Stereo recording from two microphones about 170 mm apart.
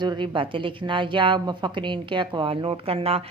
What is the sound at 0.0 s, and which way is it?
A woman's voice, 25° right (ahead or behind).